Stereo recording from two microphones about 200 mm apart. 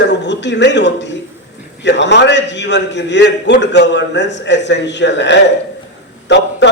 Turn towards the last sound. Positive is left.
turn(degrees=60)  # may be behind; listen again after turning